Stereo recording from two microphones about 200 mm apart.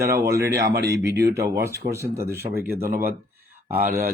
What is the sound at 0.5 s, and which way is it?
Speech, 55° right (ahead or behind).